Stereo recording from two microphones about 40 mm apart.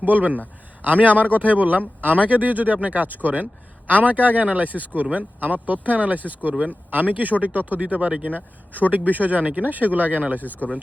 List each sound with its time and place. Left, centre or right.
0.0 s a man's voice: right